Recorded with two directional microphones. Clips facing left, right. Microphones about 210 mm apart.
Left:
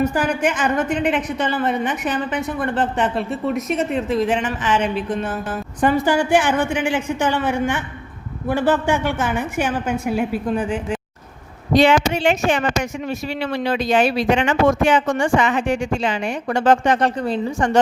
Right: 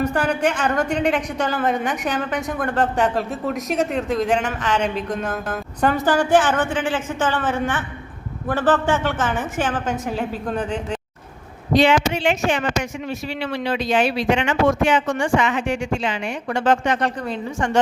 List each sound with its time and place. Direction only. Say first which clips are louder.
0.0 s a woman's voice: left 1 dB; 5° left (ahead or behind)
11.7 s speech: left 2 dB; 45° left (ahead or behind)